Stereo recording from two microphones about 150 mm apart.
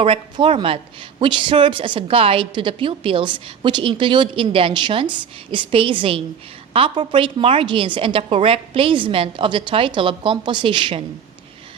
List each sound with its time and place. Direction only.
0.0 s a woman's voice: 35° right (ahead or behind)